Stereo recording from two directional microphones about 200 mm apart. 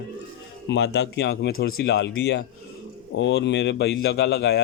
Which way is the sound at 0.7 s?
55° left (ahead or behind).